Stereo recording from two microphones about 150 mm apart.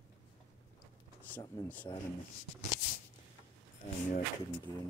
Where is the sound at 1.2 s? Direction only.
15° left (ahead or behind).